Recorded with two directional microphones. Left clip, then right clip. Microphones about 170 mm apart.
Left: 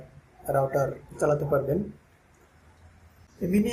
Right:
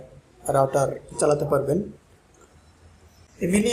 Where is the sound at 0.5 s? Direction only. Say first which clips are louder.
Right 5 dB; 10° right (ahead or behind).